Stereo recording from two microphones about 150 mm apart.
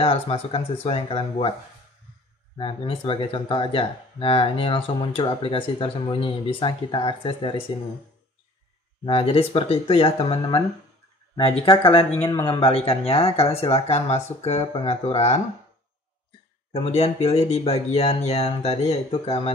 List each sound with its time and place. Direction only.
0.0 s speech: 40° left (ahead or behind)
2.5 s speech: 35° left (ahead or behind)
9.0 s speech: 40° left (ahead or behind)
12.2 s a man's voice: 20° left (ahead or behind)
12.4 s speech: 35° left (ahead or behind)
16.7 s speech: 45° left (ahead or behind)